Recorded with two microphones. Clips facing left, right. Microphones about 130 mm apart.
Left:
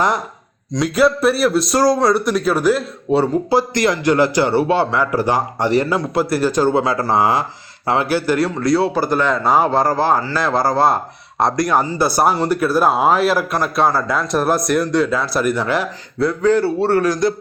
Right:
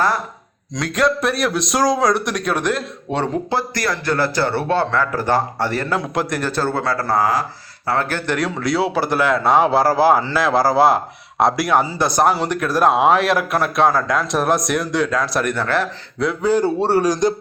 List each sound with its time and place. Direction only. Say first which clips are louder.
0.7 s a man's voice: left 4 dB; 5° left (ahead or behind); by 7.4 s 25° left (ahead or behind)
7.9 s a man's voice: left 4 dB; 10° left (ahead or behind)
16.4 s a man's voice: left 1 dB; 15° right (ahead or behind)